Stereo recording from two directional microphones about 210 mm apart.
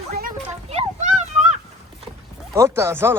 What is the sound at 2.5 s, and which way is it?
Speech, 15° right (ahead or behind).